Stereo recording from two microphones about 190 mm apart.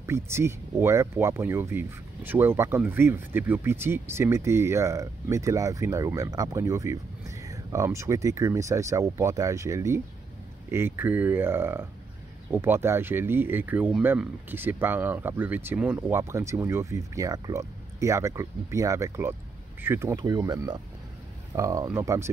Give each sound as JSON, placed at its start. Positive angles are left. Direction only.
{"t": 0.0, "sound": "speech", "side_deg": -15}